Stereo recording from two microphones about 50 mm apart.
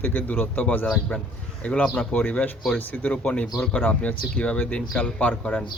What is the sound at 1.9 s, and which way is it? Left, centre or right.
Speech, left.